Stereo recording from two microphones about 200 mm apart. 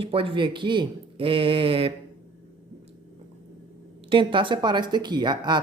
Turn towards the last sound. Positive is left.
turn(degrees=-20)  # may be behind; listen again after turning